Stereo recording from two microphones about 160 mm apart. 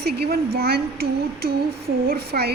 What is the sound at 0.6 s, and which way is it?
A woman's voice, 75° right (ahead or behind).